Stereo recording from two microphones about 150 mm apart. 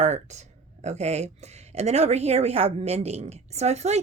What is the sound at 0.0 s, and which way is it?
A woman's voice, 50° right (ahead or behind).